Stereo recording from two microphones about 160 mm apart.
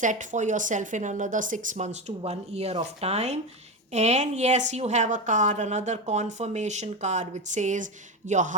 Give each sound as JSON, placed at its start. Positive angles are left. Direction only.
{"t": 0.0, "sound": "a woman's voice", "side_deg": -50}